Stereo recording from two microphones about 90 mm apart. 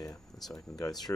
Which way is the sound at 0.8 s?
45° left (ahead or behind).